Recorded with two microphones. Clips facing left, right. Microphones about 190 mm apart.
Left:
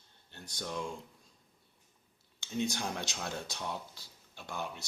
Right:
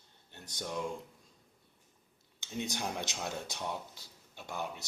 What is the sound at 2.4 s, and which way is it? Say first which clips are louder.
Speech: left 3 dB; 20° right (ahead or behind).